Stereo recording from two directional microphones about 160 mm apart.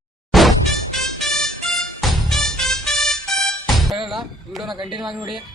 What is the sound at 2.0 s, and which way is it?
Music, centre (ahead or behind).